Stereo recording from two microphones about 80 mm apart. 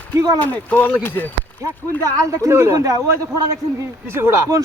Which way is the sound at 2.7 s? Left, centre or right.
Right.